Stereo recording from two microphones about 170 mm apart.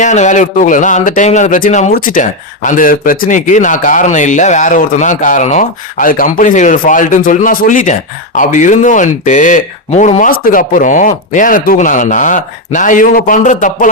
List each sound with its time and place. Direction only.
0.0 s speech: 45° left (ahead or behind)